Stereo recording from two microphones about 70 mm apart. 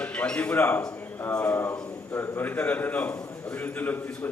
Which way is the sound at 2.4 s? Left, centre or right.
Left.